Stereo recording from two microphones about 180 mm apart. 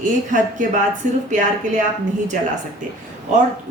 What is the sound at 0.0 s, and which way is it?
A woman's voice, 45° right (ahead or behind).